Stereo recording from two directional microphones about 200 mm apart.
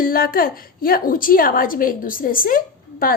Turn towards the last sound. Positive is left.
turn(degrees=45)  # may be behind; listen again after turning